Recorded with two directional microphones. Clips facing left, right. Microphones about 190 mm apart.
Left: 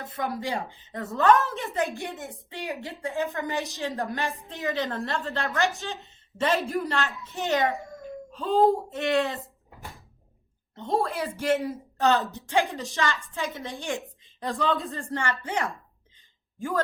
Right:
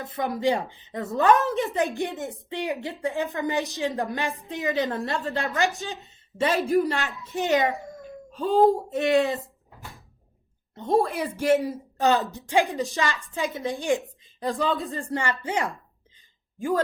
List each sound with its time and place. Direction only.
0.2 s a woman's voice: 20° right (ahead or behind)
7.7 s speech: centre (ahead or behind)
8.4 s a woman's voice: 15° right (ahead or behind)
10.9 s a woman's voice: 15° right (ahead or behind)
14.0 s a sound: centre (ahead or behind)
14.8 s a woman's voice: 10° right (ahead or behind)